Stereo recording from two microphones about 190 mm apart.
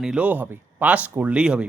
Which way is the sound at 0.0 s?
5° right (ahead or behind).